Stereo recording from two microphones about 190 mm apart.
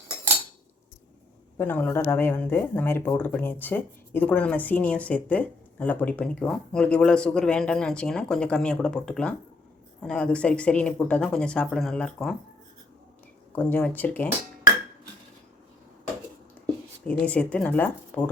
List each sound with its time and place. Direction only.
1.5 s speech: 10° left (ahead or behind)
13.6 s speech: 10° left (ahead or behind)
17.1 s speech: 5° left (ahead or behind)